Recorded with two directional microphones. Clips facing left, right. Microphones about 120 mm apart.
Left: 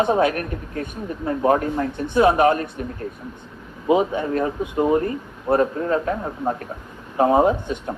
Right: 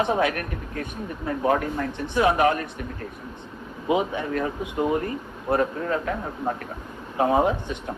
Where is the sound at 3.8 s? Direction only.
35° left (ahead or behind).